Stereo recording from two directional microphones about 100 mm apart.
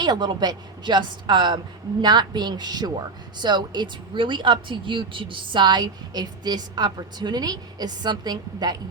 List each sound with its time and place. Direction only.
0.0 s a woman's voice: 45° right (ahead or behind)